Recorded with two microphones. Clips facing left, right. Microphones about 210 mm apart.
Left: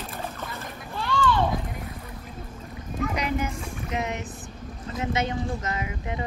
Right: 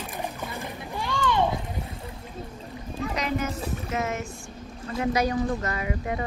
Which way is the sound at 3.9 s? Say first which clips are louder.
Even; 15° left (ahead or behind).